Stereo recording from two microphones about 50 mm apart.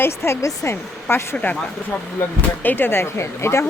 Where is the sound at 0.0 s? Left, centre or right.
Left.